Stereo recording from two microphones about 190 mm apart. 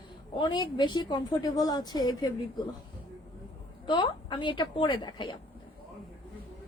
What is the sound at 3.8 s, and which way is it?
A woman's voice, 25° left (ahead or behind).